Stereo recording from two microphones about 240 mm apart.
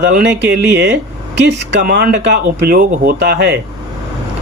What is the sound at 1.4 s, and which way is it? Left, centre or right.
Speech, right.